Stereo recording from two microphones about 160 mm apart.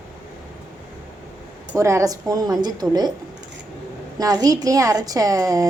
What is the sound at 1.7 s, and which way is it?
A woman's voice, 20° right (ahead or behind).